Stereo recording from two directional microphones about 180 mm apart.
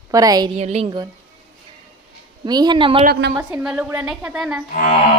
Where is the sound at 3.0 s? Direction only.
65° right (ahead or behind).